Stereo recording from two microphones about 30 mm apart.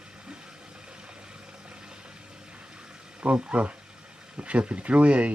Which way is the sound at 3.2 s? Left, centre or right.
Right.